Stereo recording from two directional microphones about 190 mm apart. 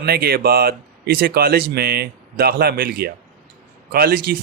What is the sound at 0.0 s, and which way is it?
Speech, 55° right (ahead or behind).